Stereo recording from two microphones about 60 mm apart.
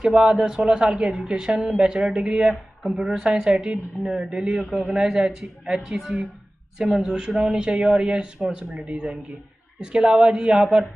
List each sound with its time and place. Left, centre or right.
0.1 s speech: centre